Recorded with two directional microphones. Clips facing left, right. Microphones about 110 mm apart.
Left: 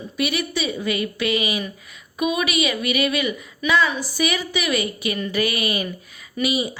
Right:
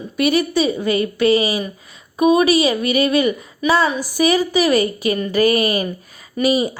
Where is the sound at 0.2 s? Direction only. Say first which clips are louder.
Right 8 dB; 40° right (ahead or behind).